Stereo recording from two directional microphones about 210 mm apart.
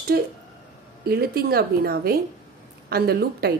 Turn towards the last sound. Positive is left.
turn(degrees=-50)  # may be behind; listen again after turning